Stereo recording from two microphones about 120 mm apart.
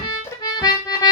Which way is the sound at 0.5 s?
35° left (ahead or behind).